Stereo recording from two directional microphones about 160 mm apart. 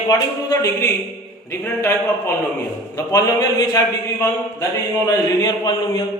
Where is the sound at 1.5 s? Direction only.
15° left (ahead or behind).